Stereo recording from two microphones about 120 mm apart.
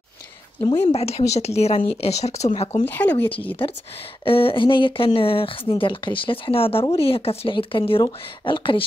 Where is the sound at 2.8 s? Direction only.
15° left (ahead or behind).